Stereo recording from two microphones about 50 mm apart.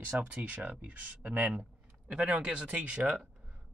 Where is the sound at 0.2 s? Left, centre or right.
Right.